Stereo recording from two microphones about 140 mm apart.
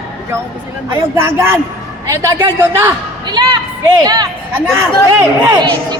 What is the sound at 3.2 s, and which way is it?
Speech, 30° right (ahead or behind).